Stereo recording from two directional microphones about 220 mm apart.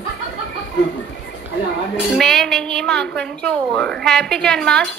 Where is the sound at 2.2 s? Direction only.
Centre (ahead or behind).